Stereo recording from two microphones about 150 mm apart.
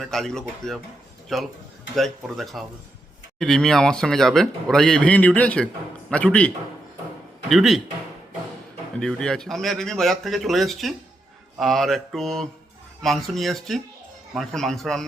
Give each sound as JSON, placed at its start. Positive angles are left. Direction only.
{"t": 0.0, "sound": "a man's voice", "side_deg": 5}
{"t": 7.5, "sound": "speech", "side_deg": 0}
{"t": 9.0, "sound": "speech", "side_deg": 5}